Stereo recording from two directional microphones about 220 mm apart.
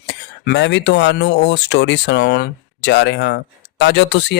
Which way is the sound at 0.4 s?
50° left (ahead or behind).